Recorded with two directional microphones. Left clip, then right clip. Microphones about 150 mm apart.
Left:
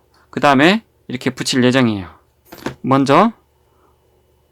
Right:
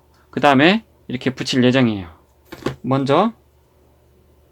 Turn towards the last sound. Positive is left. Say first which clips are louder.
# left 4 dB
turn(degrees=45)  # may be behind; listen again after turning